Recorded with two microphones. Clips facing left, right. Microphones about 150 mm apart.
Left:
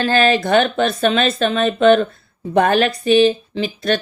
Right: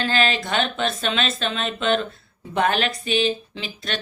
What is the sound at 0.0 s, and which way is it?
A woman's voice, 45° left (ahead or behind).